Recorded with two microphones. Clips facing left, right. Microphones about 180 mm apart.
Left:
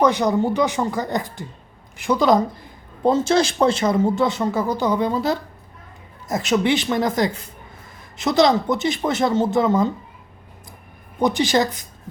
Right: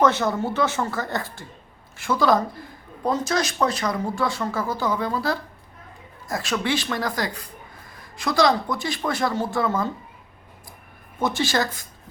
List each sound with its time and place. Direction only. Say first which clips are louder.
0.0 s speech: left 3 dB; 15° left (ahead or behind)
11.2 s speech: left 5 dB; 15° left (ahead or behind)